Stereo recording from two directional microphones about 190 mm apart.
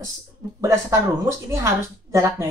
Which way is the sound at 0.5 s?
15° right (ahead or behind).